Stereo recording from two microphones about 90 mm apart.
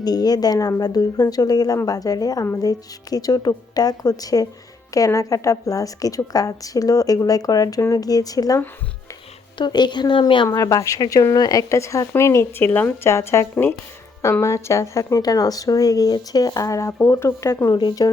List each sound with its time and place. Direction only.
0.0 s speech: 45° left (ahead or behind)
9.6 s a woman's voice: 55° left (ahead or behind)
10.5 s speech: 40° left (ahead or behind); by 13.1 s 20° left (ahead or behind)
13.1 s speech: 30° left (ahead or behind)
17.7 s speech: 50° left (ahead or behind)